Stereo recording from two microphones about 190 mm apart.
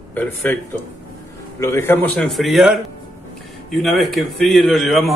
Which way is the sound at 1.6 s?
15° left (ahead or behind).